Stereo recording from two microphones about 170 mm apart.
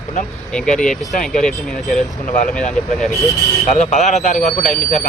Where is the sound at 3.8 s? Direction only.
40° left (ahead or behind).